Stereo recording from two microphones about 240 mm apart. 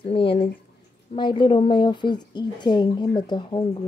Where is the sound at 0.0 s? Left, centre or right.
Left.